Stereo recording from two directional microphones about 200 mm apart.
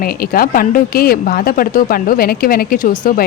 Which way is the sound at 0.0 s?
45° left (ahead or behind).